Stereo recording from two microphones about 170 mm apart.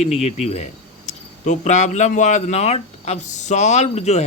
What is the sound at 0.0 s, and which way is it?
Speech, 40° left (ahead or behind).